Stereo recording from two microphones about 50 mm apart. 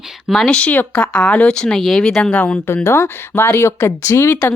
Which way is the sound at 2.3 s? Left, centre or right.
Left.